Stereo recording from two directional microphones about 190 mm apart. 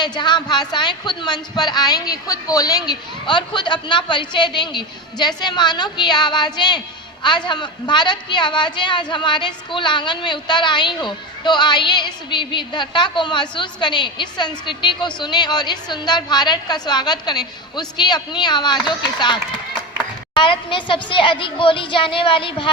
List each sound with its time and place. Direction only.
0.0 s speech: 25° left (ahead or behind)